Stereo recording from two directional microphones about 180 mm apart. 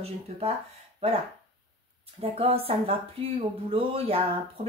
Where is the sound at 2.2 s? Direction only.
30° right (ahead or behind).